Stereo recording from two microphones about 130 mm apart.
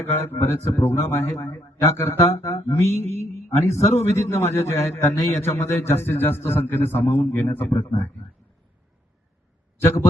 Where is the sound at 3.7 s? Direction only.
55° left (ahead or behind).